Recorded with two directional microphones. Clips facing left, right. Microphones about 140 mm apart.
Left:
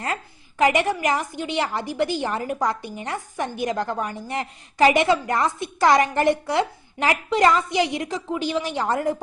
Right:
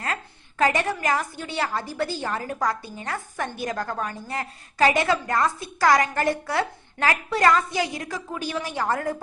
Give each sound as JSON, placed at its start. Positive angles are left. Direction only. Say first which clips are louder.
{"t": 0.6, "sound": "a woman's voice", "louder": "left 3 dB", "side_deg": 15}